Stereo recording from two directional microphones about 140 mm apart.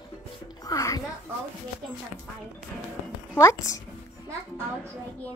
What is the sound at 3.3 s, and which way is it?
Speech, 25° left (ahead or behind).